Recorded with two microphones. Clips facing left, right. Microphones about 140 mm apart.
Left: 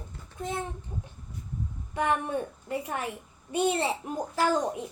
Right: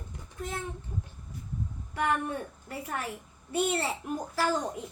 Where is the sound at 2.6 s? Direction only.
20° left (ahead or behind).